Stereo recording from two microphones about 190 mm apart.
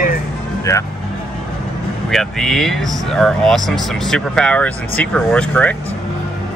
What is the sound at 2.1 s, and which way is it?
Speech, centre (ahead or behind).